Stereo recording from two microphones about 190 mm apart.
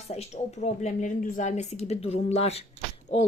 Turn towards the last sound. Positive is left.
turn(degrees=30)  # may be behind; listen again after turning